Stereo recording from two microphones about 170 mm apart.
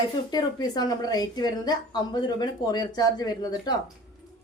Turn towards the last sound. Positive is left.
turn(degrees=25)  # may be behind; listen again after turning